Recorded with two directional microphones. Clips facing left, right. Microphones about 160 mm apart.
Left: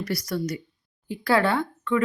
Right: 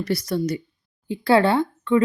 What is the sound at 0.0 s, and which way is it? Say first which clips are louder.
Speech: right 4 dB; 25° right (ahead or behind).